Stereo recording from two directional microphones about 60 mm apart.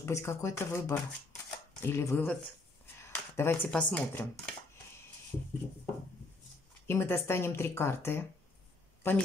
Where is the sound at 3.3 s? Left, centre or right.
Left.